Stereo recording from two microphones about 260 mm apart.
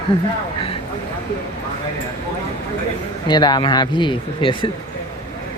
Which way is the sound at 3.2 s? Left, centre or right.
Centre.